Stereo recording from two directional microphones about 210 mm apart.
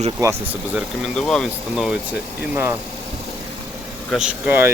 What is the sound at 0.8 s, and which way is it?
Speech, centre (ahead or behind).